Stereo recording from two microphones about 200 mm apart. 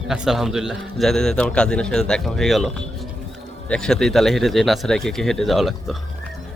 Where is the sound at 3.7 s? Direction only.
5° left (ahead or behind).